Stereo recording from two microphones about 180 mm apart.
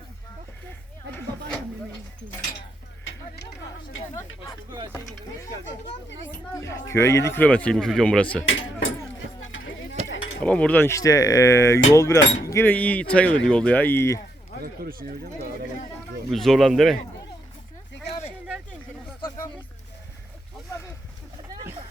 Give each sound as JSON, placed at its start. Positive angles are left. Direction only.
{"t": 3.0, "sound": "a sound", "side_deg": 90}
{"t": 6.2, "sound": "speech", "side_deg": 15}
{"t": 8.4, "sound": "speech", "side_deg": 90}
{"t": 9.5, "sound": "a sound", "side_deg": 90}
{"t": 10.4, "sound": "speech", "side_deg": 5}
{"t": 12.2, "sound": "speech", "side_deg": 90}
{"t": 12.5, "sound": "speech", "side_deg": 15}
{"t": 14.6, "sound": "speech", "side_deg": -55}
{"t": 16.3, "sound": "speech", "side_deg": 0}